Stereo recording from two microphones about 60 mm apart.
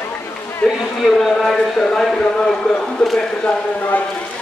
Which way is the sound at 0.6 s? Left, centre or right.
Left.